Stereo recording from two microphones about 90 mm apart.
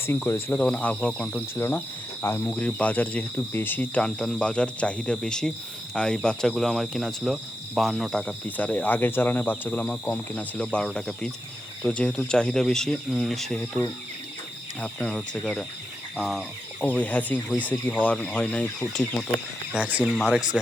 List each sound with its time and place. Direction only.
0.0 s speech: 25° left (ahead or behind)
0.6 s speech: 15° left (ahead or behind)
2.6 s speech: 15° left (ahead or behind)
8.4 s speech: 20° left (ahead or behind); by 13.6 s centre (ahead or behind)
14.8 s speech: 10° left (ahead or behind)
16.8 s speech: 15° left (ahead or behind)
19.7 s speech: 15° right (ahead or behind)
20.1 s speech: centre (ahead or behind)